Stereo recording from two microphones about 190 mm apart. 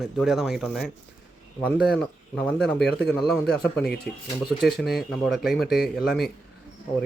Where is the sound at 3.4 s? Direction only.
55° left (ahead or behind).